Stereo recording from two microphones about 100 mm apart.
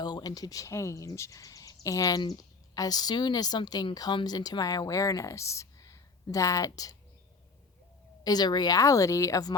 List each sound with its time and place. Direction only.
0.0 s speech: 45° left (ahead or behind)
8.2 s speech: 40° left (ahead or behind)